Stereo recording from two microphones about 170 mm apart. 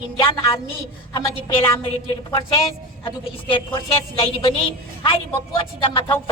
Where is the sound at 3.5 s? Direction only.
35° left (ahead or behind).